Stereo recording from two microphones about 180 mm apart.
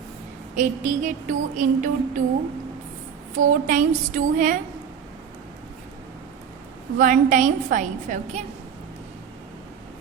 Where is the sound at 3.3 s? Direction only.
45° right (ahead or behind).